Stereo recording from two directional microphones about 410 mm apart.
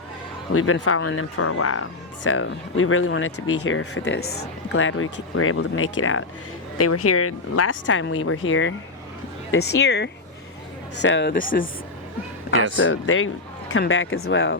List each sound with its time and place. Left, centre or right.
0.5 s speech: left
12.8 s speech: left